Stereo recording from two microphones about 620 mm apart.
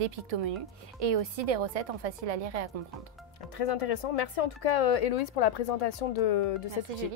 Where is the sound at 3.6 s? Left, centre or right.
Left.